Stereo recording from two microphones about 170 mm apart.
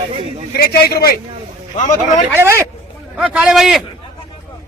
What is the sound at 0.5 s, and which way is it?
Speech, 65° left (ahead or behind).